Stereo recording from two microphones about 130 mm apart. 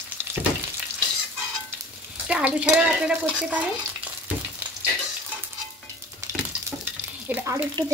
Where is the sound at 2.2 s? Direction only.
10° right (ahead or behind).